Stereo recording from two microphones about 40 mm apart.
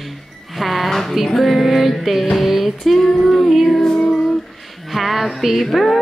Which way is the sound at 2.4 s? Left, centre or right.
Centre.